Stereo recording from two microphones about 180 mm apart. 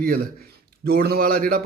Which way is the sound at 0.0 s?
55° right (ahead or behind).